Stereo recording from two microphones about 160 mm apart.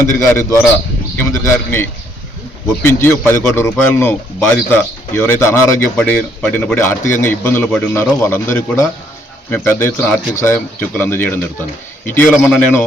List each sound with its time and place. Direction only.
0.0 s speech: 15° left (ahead or behind)